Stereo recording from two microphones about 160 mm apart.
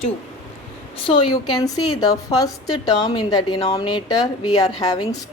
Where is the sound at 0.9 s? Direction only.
30° left (ahead or behind).